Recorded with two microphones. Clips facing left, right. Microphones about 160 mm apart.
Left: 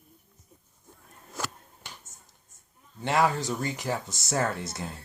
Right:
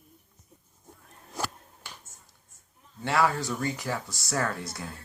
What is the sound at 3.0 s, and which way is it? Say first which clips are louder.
Speech: left 1 dB; 20° left (ahead or behind).